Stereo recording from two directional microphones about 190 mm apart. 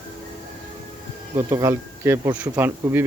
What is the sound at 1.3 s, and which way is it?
Speech, 15° right (ahead or behind).